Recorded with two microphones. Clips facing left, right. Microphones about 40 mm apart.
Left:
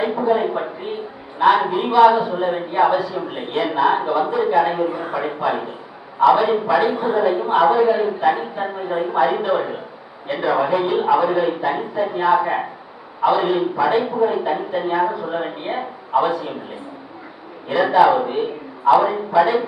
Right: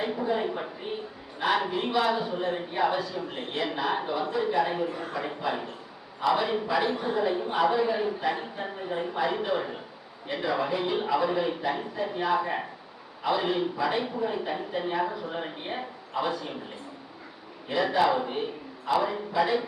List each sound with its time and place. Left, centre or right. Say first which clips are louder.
0.0 s a man's voice: left 9 dB; centre
17.7 s a man's voice: left 10 dB; centre